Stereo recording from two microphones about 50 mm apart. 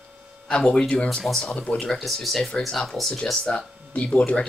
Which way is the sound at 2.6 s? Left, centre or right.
Centre.